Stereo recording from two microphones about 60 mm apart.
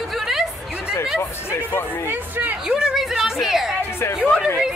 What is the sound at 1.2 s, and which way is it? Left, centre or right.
Speech, left.